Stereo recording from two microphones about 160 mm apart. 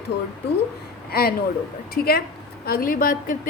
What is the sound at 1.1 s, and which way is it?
Speech, 75° left (ahead or behind).